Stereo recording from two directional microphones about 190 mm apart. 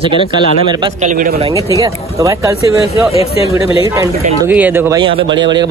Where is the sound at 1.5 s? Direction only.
15° right (ahead or behind).